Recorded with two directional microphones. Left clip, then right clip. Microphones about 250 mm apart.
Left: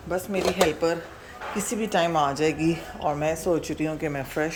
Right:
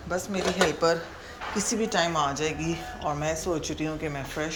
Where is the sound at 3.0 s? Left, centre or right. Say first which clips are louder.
Left 1 dB; centre.